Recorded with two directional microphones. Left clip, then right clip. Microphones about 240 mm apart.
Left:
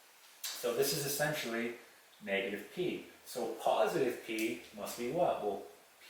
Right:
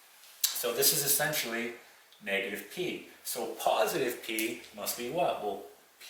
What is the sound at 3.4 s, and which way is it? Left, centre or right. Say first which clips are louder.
Speech: right 3 dB; centre.